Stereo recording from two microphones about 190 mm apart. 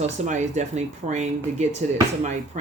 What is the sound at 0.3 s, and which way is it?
Speech, 40° right (ahead or behind).